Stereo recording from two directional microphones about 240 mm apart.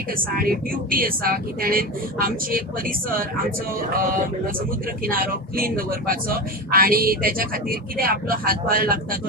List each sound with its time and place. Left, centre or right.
0.4 s speech: right
5.0 s speech: right